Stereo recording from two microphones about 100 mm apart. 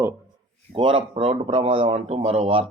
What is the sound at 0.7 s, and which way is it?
Speech, 60° right (ahead or behind).